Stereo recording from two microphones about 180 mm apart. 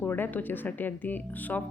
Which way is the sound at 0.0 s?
10° left (ahead or behind).